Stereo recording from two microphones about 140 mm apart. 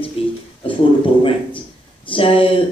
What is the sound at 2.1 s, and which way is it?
Speech, 40° left (ahead or behind).